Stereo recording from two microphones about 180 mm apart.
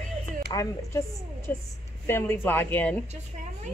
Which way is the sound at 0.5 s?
20° left (ahead or behind).